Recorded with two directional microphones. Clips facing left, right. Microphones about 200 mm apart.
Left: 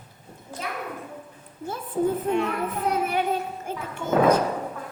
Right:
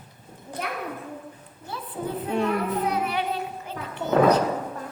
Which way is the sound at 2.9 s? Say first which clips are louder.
Left 2 dB; 45° left (ahead or behind).